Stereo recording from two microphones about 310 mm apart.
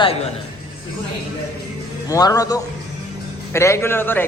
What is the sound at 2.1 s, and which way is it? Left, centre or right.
A man's voice, centre.